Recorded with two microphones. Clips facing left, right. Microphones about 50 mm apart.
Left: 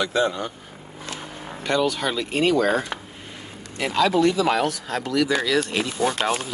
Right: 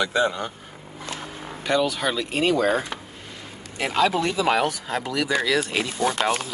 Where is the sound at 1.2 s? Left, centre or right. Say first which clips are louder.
Left 2 dB; centre.